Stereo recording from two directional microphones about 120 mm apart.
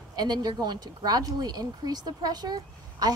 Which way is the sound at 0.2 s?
35° right (ahead or behind).